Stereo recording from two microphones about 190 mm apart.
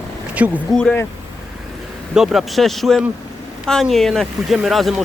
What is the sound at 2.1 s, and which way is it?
Speech, centre (ahead or behind).